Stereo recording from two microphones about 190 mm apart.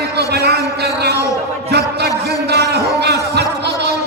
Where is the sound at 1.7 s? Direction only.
60° right (ahead or behind).